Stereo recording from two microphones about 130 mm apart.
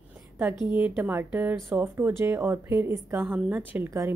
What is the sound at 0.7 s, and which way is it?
A woman's voice, 10° right (ahead or behind).